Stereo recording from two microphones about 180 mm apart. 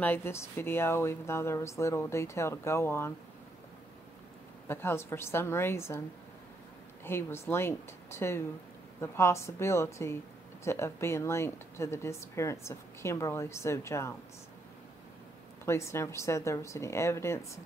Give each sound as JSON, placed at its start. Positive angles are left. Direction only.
{"t": 0.0, "sound": "a woman's voice", "side_deg": 10}
{"t": 4.6, "sound": "a woman's voice", "side_deg": 15}
{"t": 7.1, "sound": "a woman's voice", "side_deg": 15}
{"t": 15.6, "sound": "a woman's voice", "side_deg": 15}